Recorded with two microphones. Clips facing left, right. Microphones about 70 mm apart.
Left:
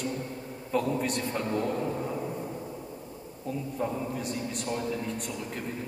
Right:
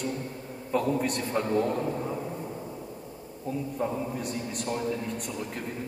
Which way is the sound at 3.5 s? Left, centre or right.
Centre.